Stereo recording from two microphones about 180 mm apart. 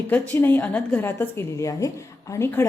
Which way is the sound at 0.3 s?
10° left (ahead or behind).